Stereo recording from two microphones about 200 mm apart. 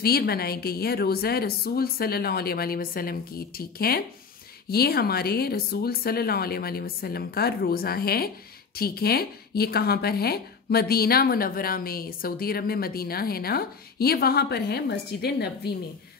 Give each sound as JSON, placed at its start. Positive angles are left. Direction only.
{"t": 0.0, "sound": "speech", "side_deg": 50}